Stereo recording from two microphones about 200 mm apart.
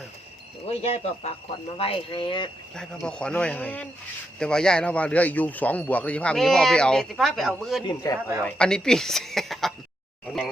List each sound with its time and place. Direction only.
0.7 s speech: 30° left (ahead or behind)
3.1 s a man's voice: 5° left (ahead or behind)
7.9 s speech: 20° left (ahead or behind)
8.4 s a man's voice: 5° left (ahead or behind)